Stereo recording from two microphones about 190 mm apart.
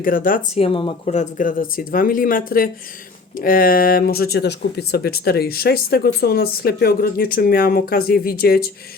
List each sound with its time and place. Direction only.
0.0 s speech: 50° left (ahead or behind)
0.5 s speech: 30° left (ahead or behind); by 8.7 s 55° left (ahead or behind)